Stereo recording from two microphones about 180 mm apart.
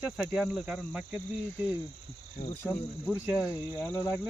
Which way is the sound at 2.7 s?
5° right (ahead or behind).